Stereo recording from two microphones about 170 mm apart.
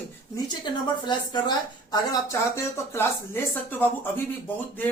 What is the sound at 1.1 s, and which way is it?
A woman's voice, 25° left (ahead or behind).